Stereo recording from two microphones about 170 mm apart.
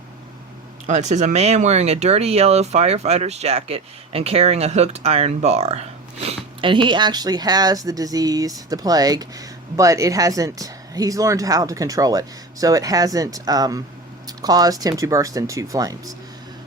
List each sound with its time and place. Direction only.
0.9 s speech: 45° right (ahead or behind); by 16.1 s 20° right (ahead or behind)